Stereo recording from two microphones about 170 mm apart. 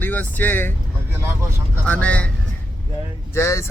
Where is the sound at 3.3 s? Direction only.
15° left (ahead or behind).